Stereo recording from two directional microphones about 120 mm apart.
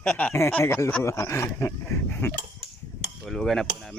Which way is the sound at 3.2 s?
Centre (ahead or behind).